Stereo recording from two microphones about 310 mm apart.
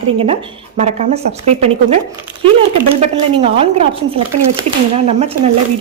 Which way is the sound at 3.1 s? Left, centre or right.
Centre.